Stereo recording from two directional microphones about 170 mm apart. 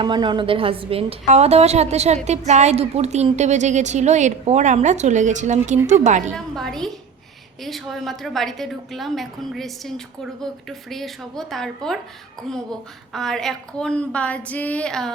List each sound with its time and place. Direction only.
0.0 s a woman's voice: 25° right (ahead or behind); by 6.3 s 45° right (ahead or behind)
6.3 s a woman's voice: 5° left (ahead or behind)
13.1 s a woman's voice: 5° left (ahead or behind)